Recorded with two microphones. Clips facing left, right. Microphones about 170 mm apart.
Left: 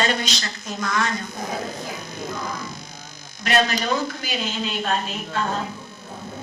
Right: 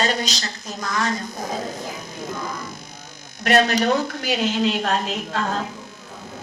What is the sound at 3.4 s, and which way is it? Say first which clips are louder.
A woman's voice: right 4 dB; 65° right (ahead or behind).